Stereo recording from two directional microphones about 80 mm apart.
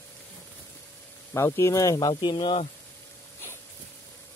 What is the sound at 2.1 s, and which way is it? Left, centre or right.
Speech, left.